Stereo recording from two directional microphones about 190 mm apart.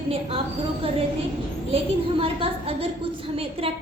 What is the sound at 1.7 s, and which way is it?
A woman's voice, 30° right (ahead or behind).